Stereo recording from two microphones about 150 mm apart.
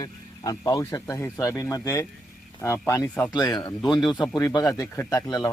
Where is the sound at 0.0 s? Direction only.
25° left (ahead or behind).